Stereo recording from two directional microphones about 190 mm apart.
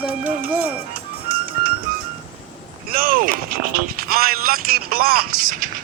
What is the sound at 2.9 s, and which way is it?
Speech, 50° right (ahead or behind).